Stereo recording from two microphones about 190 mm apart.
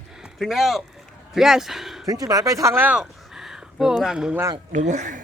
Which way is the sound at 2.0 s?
20° right (ahead or behind).